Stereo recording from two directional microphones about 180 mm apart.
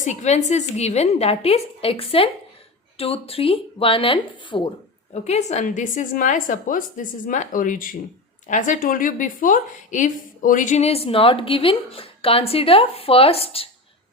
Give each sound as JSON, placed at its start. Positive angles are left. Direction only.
{"t": 0.0, "sound": "a woman's voice", "side_deg": 40}
{"t": 5.1, "sound": "a woman's voice", "side_deg": 40}